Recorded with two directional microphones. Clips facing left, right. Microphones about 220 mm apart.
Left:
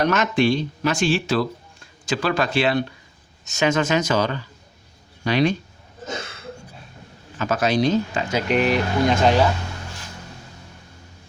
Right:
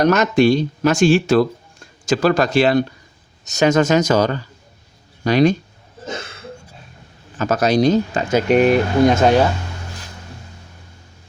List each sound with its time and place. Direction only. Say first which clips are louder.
0.0 s speech: right 5 dB; 40° right (ahead or behind)
7.3 s speech: right 4 dB; 40° right (ahead or behind)